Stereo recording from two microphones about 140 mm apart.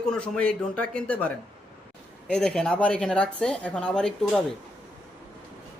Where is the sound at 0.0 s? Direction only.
5° left (ahead or behind).